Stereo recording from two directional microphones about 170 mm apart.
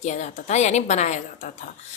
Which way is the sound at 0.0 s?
45° left (ahead or behind).